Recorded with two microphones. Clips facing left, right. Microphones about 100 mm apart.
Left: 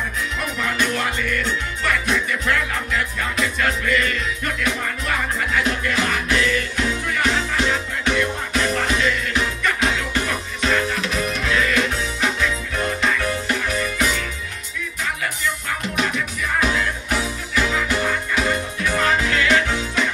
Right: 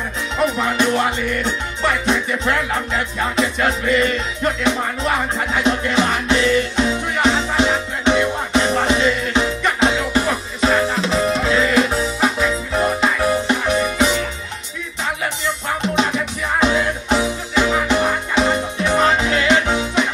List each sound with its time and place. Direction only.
0.4 s music: 25° right (ahead or behind)
15.4 s music: 25° right (ahead or behind)